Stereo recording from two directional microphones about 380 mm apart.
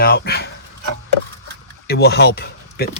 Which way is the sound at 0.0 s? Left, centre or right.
Left.